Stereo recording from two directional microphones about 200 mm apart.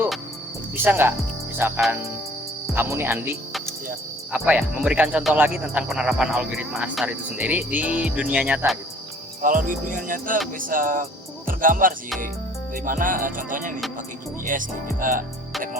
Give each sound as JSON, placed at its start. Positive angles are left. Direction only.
{"t": 0.8, "sound": "speech", "side_deg": -10}
{"t": 9.4, "sound": "music", "side_deg": -40}